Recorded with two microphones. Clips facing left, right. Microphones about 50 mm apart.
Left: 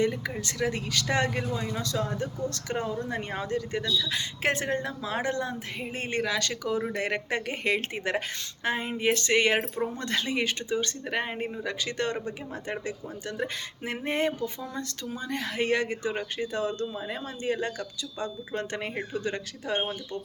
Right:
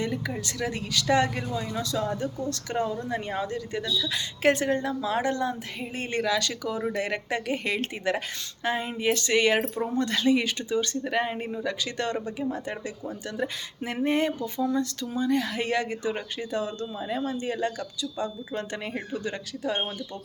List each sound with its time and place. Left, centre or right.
0.0 s speech: left
2.2 s speech: left